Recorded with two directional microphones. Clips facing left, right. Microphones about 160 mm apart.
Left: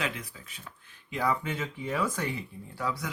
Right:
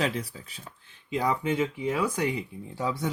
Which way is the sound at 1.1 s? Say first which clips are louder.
Right 3 dB; 15° right (ahead or behind).